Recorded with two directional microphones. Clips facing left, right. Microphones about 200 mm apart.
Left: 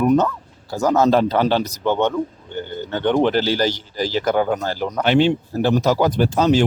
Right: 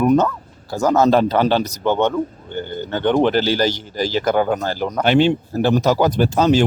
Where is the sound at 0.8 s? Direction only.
50° right (ahead or behind).